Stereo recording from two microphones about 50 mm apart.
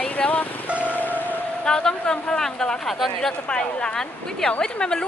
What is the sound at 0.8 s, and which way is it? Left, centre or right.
Music, left.